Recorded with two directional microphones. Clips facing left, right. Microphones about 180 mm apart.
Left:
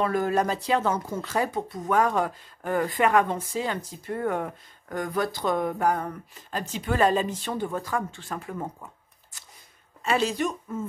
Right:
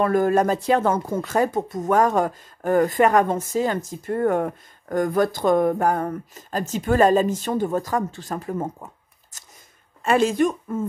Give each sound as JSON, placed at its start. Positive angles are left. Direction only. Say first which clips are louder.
{"t": 0.0, "sound": "speech", "louder": "right 6 dB", "side_deg": -50}
{"t": 9.3, "sound": "a sound", "louder": "right 2 dB", "side_deg": -45}
{"t": 10.0, "sound": "speech", "louder": "right 6 dB", "side_deg": -50}